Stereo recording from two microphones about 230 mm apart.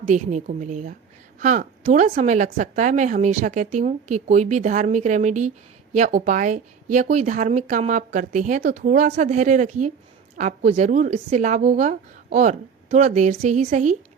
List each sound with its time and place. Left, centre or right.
0.0 s a woman's voice: right